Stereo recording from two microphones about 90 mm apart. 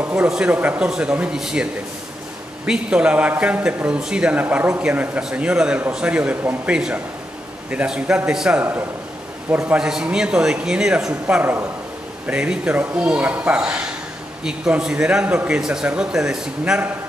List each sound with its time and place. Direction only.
0.0 s a sound: 15° right (ahead or behind)
0.3 s speech: 15° right (ahead or behind)
8.5 s a man's voice: 25° right (ahead or behind)
9.7 s speech: 5° right (ahead or behind)